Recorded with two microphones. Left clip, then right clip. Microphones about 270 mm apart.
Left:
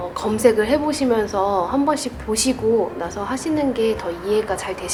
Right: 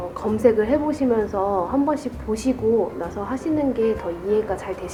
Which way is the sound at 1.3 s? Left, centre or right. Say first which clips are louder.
Left 2 dB; right.